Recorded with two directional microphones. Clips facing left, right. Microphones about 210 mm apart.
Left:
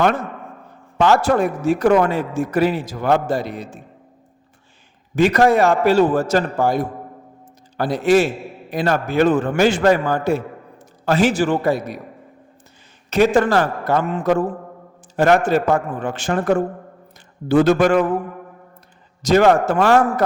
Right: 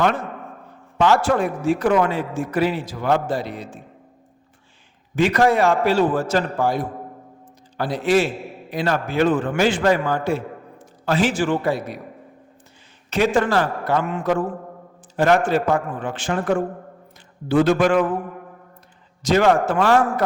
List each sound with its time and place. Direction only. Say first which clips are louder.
0.9 s a man's voice: left 2 dB; 45° left (ahead or behind)
5.1 s a man's voice: left 3 dB; 40° left (ahead or behind)
13.1 s a man's voice: left 4 dB; 40° left (ahead or behind)
19.2 s a man's voice: left 3 dB; 45° left (ahead or behind)